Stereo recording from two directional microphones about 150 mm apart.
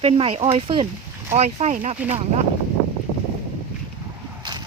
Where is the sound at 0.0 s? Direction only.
40° right (ahead or behind).